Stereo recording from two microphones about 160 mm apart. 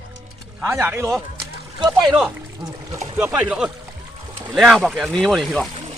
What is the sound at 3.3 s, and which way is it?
Speech, 5° right (ahead or behind).